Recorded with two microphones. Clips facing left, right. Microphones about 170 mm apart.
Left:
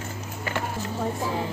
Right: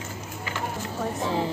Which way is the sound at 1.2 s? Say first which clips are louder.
Right 2 dB; 30° right (ahead or behind).